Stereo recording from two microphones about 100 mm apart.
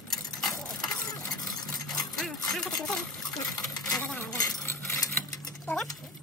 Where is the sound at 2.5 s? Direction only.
5° left (ahead or behind).